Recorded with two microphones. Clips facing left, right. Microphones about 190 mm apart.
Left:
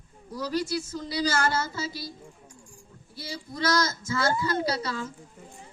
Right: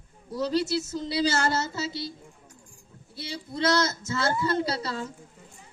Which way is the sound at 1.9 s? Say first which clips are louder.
Right 3 dB; 25° right (ahead or behind).